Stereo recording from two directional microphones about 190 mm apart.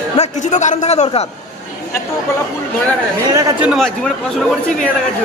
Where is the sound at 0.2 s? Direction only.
40° left (ahead or behind).